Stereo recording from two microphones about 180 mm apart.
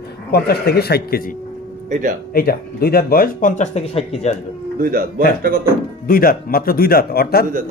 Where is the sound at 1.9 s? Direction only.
45° right (ahead or behind).